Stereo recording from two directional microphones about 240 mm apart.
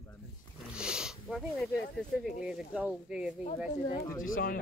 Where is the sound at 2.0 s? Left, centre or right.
Centre.